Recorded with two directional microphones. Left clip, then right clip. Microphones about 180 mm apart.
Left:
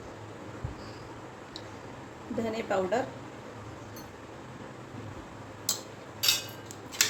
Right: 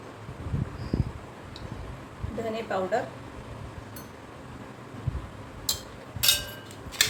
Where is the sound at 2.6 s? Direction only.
25° left (ahead or behind).